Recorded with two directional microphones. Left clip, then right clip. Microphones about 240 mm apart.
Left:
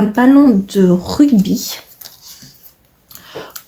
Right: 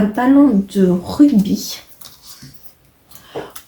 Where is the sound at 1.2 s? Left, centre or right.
Left.